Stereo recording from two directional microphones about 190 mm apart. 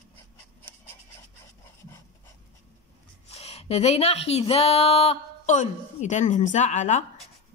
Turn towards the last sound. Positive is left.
turn(degrees=40)  # may be behind; listen again after turning